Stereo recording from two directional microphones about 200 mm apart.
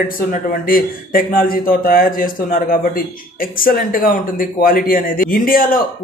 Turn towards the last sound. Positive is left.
turn(degrees=45)  # may be behind; listen again after turning